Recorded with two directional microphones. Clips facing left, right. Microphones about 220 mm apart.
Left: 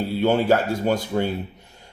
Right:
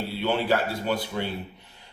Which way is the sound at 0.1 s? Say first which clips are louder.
Left 6 dB; 45° left (ahead or behind).